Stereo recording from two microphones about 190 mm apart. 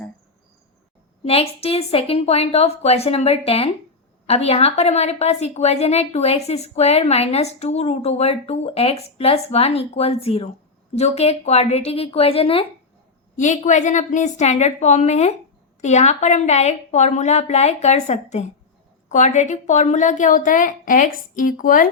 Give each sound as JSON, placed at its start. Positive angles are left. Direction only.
{"t": 1.3, "sound": "a woman's voice", "side_deg": 30}